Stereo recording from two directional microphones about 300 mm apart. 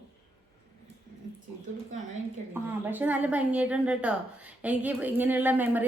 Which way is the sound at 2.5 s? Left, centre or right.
Centre.